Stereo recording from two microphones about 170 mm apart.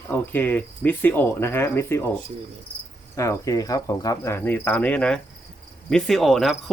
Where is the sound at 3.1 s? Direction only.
20° left (ahead or behind).